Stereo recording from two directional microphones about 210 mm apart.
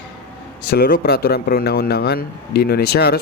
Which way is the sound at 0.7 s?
50° left (ahead or behind).